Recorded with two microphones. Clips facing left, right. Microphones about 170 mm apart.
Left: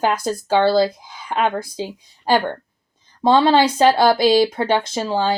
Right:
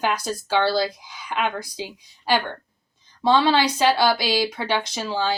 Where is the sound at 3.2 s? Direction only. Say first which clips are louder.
Left 4 dB; 45° left (ahead or behind).